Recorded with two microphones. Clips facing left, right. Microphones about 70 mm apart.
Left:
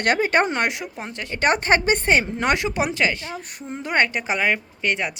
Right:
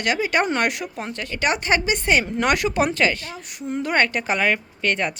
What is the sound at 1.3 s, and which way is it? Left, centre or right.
A woman's voice, left.